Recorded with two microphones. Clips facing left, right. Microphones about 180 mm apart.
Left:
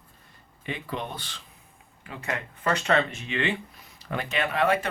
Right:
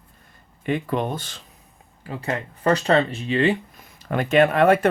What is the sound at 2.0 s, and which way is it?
Speech, 35° right (ahead or behind).